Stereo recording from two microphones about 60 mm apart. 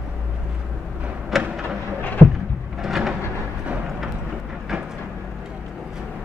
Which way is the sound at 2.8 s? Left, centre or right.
Centre.